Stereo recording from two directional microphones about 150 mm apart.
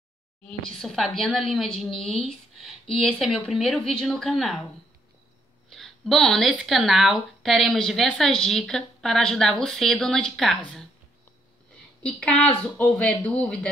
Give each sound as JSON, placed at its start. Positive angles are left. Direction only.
{"t": 0.5, "sound": "speech", "side_deg": 5}
{"t": 5.7, "sound": "a sound", "side_deg": 0}
{"t": 6.5, "sound": "speech", "side_deg": 0}
{"t": 12.0, "sound": "speech", "side_deg": 5}